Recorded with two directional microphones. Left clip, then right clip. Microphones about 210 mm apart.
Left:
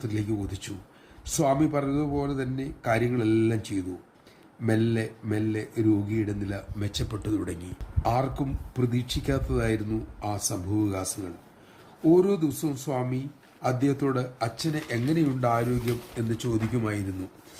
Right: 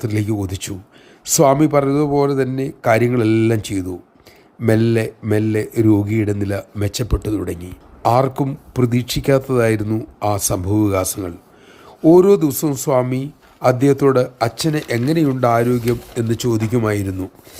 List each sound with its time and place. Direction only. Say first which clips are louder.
0.0 s a man's voice: right 9 dB; 45° right (ahead or behind)
8.1 s a man's voice: right 13 dB; 40° right (ahead or behind)